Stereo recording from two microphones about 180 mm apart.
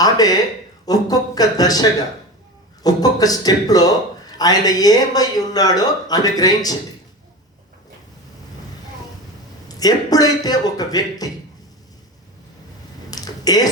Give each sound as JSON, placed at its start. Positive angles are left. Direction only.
{"t": 0.0, "sound": "a man's voice", "side_deg": 20}
{"t": 9.6, "sound": "a man's voice", "side_deg": 20}
{"t": 13.1, "sound": "a sound", "side_deg": 20}